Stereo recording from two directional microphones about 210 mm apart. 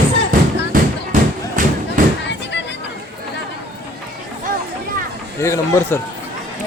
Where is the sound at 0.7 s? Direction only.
40° right (ahead or behind).